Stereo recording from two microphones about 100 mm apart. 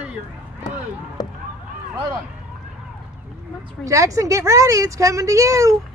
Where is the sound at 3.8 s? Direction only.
35° right (ahead or behind).